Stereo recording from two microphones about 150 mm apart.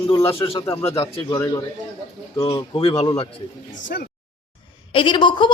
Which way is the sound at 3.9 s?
85° left.